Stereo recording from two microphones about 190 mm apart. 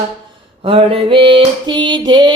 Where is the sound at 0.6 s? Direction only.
30° right (ahead or behind).